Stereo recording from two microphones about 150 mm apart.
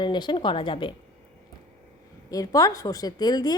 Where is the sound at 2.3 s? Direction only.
25° left (ahead or behind).